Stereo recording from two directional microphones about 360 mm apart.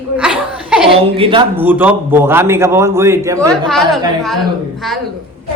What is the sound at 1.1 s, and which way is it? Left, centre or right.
A man's voice, centre.